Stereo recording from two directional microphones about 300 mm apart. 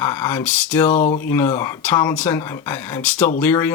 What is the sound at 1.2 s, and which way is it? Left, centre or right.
Speech, centre.